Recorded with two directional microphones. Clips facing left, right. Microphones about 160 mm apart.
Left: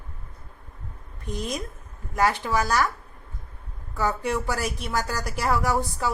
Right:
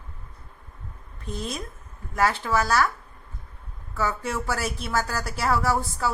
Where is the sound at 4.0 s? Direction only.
15° left (ahead or behind).